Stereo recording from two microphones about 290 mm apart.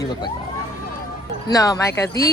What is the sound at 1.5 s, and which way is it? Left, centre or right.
Speech, centre.